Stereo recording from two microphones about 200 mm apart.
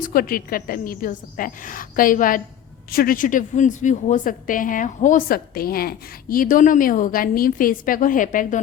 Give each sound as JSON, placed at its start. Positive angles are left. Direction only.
{"t": 0.0, "sound": "a woman's voice", "side_deg": 45}